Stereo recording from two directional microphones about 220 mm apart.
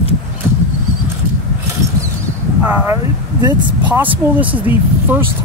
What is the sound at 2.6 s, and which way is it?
Speech, 5° right (ahead or behind).